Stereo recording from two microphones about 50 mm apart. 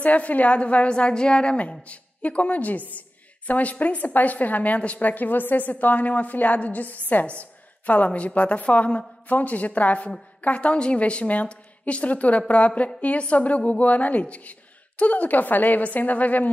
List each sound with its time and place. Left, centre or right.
0.0 s a woman's voice: left